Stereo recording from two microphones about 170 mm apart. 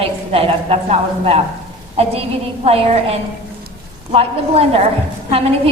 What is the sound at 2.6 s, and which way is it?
Speech, 35° right (ahead or behind).